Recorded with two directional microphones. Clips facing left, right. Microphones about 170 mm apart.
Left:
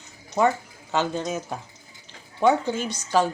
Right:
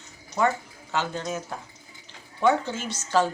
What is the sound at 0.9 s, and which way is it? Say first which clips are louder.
A woman's voice: left 4 dB; 15° left (ahead or behind).